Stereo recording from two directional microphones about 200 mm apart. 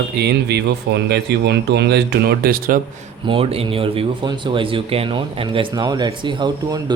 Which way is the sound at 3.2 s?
30° right (ahead or behind).